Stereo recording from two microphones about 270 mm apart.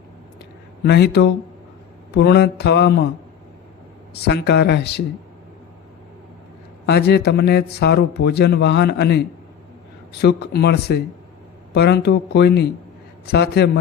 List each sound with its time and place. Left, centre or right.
0.9 s speech: left
4.1 s speech: left
6.8 s speech: left